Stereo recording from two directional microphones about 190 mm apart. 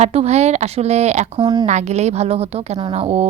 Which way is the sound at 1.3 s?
20° right (ahead or behind).